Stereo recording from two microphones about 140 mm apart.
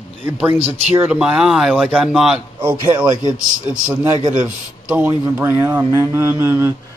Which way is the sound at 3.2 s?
30° left (ahead or behind).